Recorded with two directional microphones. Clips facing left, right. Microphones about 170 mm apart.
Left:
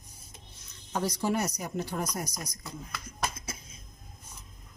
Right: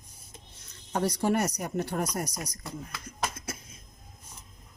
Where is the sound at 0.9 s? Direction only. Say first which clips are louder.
Right 3 dB; 60° right (ahead or behind).